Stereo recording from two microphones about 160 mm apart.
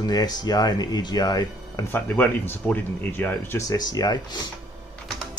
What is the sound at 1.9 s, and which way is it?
Speech, 10° left (ahead or behind).